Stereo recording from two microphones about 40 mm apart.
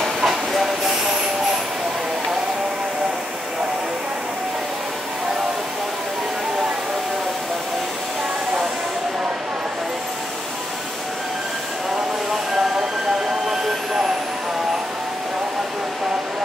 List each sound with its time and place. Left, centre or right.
0.2 s train: centre
13.5 s vehicle: centre